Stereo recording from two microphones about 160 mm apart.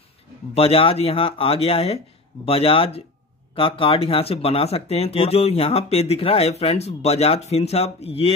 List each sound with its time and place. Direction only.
0.6 s speech: 35° left (ahead or behind)